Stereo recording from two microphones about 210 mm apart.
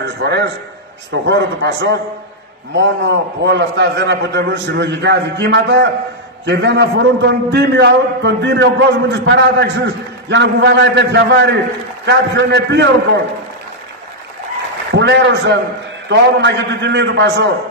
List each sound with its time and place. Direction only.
0.0 s a man's voice: 55° right (ahead or behind)
15.0 s a man's voice: 55° right (ahead or behind)